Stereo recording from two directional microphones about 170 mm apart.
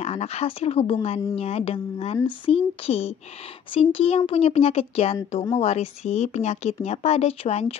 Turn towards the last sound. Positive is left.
turn(degrees=40)  # may be behind; listen again after turning